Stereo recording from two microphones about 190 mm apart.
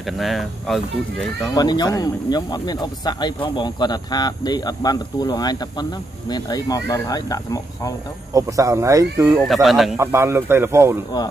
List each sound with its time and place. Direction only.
0.0 s speech: centre (ahead or behind)
1.5 s speech: 20° left (ahead or behind)
8.3 s speech: 20° right (ahead or behind)
9.4 s speech: centre (ahead or behind)
9.9 s speech: 15° right (ahead or behind)